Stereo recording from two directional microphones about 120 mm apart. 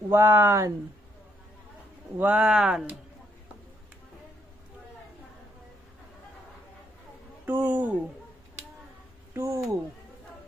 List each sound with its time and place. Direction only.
0.1 s speech: 20° right (ahead or behind)
2.1 s speech: 10° right (ahead or behind)
7.4 s speech: 15° right (ahead or behind)
9.3 s speech: 25° right (ahead or behind)